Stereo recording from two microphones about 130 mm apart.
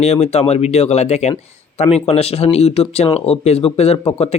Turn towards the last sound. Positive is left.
turn(degrees=50)  # may be behind; listen again after turning